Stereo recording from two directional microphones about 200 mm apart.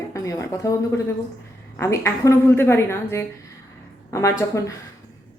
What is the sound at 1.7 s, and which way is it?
Speech, 15° left (ahead or behind).